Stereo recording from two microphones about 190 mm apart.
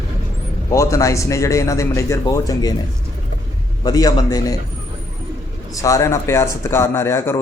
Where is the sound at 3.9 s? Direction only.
20° left (ahead or behind).